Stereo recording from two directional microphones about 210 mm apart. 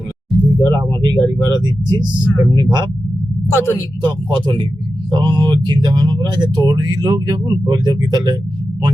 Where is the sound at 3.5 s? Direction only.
10° left (ahead or behind).